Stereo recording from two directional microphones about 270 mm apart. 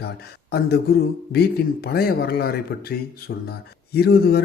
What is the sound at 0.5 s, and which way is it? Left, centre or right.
A man's voice, left.